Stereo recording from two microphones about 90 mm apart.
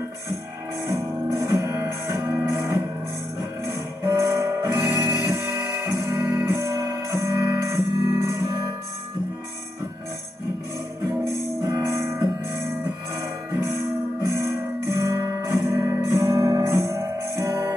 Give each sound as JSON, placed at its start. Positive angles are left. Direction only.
{"t": 0.8, "sound": "music", "side_deg": -35}
{"t": 11.2, "sound": "music", "side_deg": -35}
{"t": 15.0, "sound": "music", "side_deg": -40}